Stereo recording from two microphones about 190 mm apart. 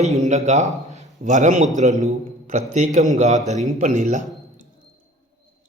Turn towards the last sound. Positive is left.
turn(degrees=-40)  # may be behind; listen again after turning